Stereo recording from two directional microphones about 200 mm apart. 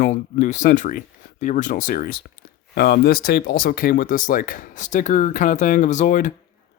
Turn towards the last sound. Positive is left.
turn(degrees=40)  # may be behind; listen again after turning